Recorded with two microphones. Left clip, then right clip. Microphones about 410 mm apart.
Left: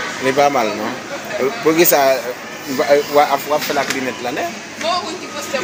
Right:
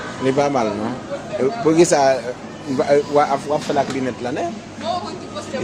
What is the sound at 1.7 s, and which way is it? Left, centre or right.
Speech, right.